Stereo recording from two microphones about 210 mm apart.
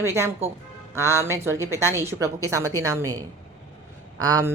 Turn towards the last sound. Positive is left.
turn(degrees=-15)  # may be behind; listen again after turning